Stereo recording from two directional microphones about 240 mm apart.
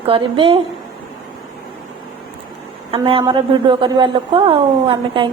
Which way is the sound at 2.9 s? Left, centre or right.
Right.